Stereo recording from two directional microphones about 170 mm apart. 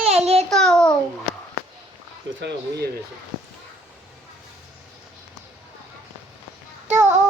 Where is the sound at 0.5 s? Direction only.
5° left (ahead or behind).